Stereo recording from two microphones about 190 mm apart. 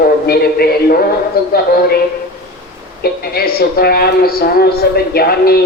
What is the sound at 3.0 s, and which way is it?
A man's voice, 55° left (ahead or behind).